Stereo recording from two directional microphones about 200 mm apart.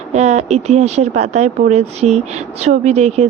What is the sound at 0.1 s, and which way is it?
Speech, 35° right (ahead or behind).